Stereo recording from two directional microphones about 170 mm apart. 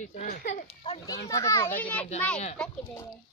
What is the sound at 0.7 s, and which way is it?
Children playing, 35° left (ahead or behind).